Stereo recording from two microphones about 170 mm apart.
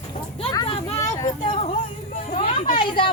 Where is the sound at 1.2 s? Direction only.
25° left (ahead or behind).